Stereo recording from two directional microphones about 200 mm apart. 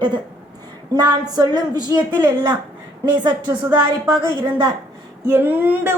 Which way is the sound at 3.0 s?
20° right (ahead or behind).